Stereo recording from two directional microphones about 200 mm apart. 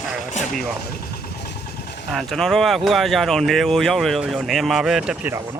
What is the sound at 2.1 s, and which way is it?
Speech, centre (ahead or behind).